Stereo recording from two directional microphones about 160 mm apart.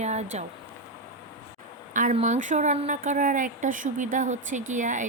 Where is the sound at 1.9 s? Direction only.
55° right (ahead or behind).